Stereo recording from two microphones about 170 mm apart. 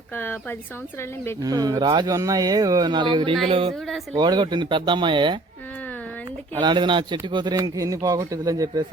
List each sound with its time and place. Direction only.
1.4 s a man's voice: 20° right (ahead or behind)
6.6 s a man's voice: 25° right (ahead or behind)